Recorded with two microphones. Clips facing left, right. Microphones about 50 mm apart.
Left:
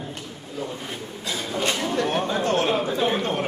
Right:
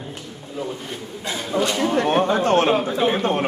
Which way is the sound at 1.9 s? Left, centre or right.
Right.